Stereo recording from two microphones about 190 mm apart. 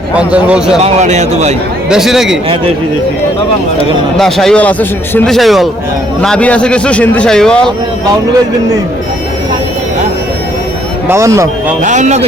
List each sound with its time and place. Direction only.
0.2 s speech: 5° right (ahead or behind)
0.9 s a man's voice: 35° right (ahead or behind)
1.9 s speech: centre (ahead or behind)
4.2 s speech: centre (ahead or behind)
11.1 s speech: 15° right (ahead or behind)
11.8 s a man's voice: 40° right (ahead or behind)